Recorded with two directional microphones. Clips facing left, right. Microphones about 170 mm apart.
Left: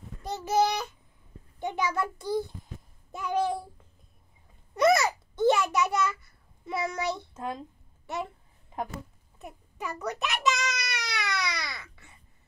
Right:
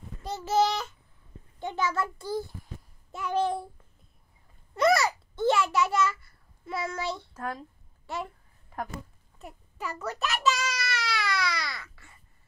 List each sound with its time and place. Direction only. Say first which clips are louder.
0.2 s a child's voice: even; 20° left (ahead or behind)
1.6 s child singing: even; 15° left (ahead or behind)
3.3 s a child's voice: right 1 dB; centre (ahead or behind)
4.7 s a child's voice: left 1 dB; 20° left (ahead or behind)
9.4 s a sound: even; 15° left (ahead or behind)